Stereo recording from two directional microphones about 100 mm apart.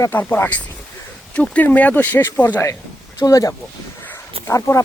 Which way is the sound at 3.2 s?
35° left (ahead or behind).